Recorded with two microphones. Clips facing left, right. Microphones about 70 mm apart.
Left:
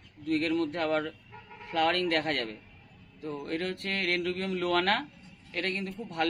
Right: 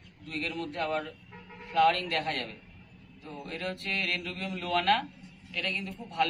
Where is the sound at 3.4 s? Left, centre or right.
Left.